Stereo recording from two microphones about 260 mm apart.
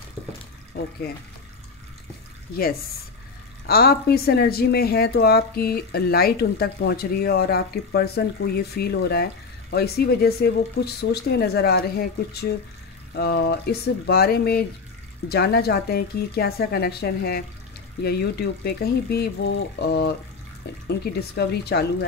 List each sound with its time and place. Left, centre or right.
0.7 s speech: left
3.6 s speech: left